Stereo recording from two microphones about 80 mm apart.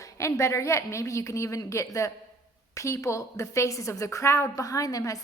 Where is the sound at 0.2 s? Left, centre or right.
Left.